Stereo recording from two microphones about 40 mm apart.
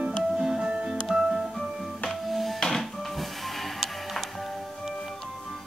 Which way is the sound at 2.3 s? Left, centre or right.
Centre.